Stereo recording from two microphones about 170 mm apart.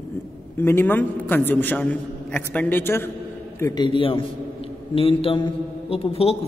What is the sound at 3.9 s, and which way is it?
A man's voice, 30° left (ahead or behind).